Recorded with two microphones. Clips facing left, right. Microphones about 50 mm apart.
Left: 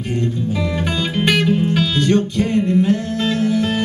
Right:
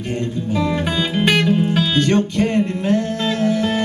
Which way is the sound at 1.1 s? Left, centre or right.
Centre.